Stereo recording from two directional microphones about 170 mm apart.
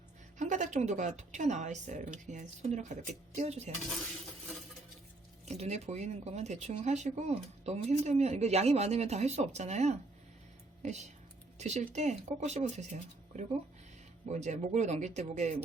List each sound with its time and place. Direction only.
0.3 s a woman's voice: 45° right (ahead or behind)
5.5 s speech: 40° right (ahead or behind)